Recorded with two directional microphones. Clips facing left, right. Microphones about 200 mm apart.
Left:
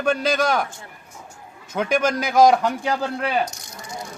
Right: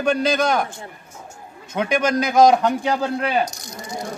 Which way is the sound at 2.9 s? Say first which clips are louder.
Right 2 dB; 20° right (ahead or behind).